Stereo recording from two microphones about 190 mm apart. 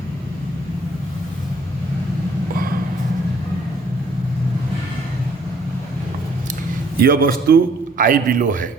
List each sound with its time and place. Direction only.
7.0 s a man's voice: 50° right (ahead or behind)